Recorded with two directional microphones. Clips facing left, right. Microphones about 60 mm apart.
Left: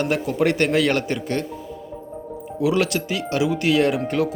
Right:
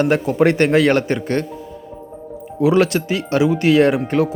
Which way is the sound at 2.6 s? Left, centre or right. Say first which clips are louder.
Right 6 dB; right.